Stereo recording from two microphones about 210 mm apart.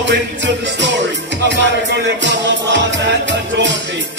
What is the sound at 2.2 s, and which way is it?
Music, 55° right (ahead or behind).